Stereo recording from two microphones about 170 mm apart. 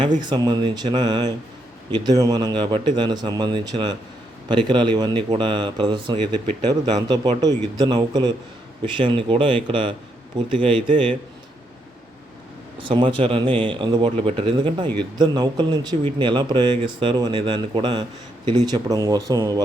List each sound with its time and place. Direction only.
0.2 s speech: 25° right (ahead or behind)
12.8 s speech: 30° right (ahead or behind)